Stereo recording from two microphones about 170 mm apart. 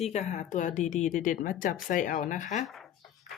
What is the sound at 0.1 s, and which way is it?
A woman's voice, 40° left (ahead or behind).